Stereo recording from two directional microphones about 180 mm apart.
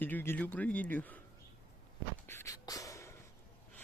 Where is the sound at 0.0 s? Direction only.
10° left (ahead or behind).